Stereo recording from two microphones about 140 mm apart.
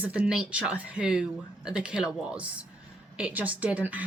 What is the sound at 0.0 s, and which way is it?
A woman's voice, 10° right (ahead or behind).